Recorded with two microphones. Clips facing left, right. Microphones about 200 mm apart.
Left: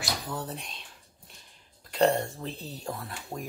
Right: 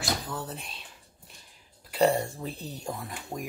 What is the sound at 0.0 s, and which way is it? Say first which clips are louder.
Speech: right 1 dB; centre (ahead or behind).